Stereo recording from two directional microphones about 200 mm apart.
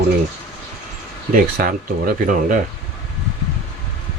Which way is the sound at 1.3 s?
45° right (ahead or behind).